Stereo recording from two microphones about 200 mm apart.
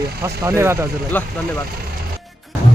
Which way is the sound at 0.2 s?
15° right (ahead or behind).